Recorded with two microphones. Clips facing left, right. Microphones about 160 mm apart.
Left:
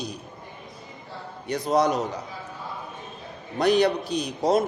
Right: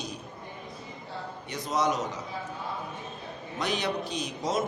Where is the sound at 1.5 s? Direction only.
65° left (ahead or behind).